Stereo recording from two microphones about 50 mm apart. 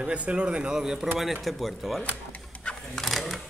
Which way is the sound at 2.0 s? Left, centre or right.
Left.